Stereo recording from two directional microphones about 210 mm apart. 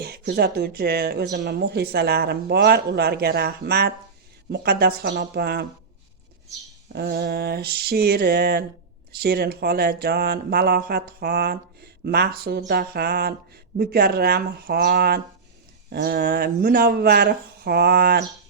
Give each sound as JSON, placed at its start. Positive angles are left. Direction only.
{"t": 0.0, "sound": "speech", "side_deg": -50}
{"t": 6.8, "sound": "speech", "side_deg": -50}